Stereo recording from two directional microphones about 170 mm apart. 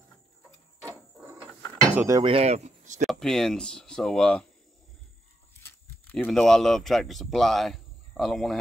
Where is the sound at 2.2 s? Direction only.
35° right (ahead or behind).